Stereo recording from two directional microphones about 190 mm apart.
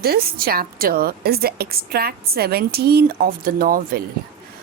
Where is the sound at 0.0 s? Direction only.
50° right (ahead or behind).